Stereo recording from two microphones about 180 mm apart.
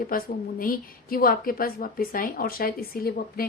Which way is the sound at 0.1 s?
50° left (ahead or behind).